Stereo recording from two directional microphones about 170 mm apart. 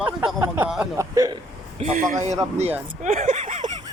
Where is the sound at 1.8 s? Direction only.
45° right (ahead or behind).